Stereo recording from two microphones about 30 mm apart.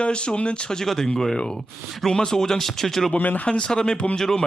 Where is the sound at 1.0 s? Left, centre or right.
Centre.